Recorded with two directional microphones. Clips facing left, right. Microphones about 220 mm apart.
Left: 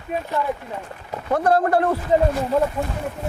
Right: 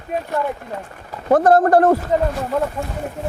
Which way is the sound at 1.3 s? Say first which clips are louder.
Right 5 dB; 45° right (ahead or behind).